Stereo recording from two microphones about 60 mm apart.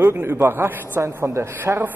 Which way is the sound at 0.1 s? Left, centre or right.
Right.